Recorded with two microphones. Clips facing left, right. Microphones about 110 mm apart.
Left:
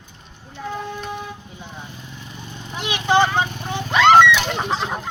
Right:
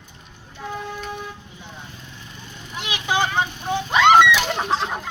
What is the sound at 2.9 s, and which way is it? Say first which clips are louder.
Vehicle: left 6 dB; 50° left (ahead or behind).